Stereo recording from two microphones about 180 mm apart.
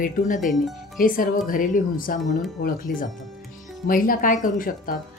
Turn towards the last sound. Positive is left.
turn(degrees=50)  # may be behind; listen again after turning